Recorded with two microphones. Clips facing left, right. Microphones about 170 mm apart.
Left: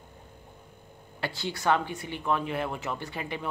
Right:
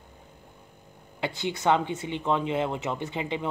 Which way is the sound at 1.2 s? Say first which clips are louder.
Right 3 dB; 20° right (ahead or behind).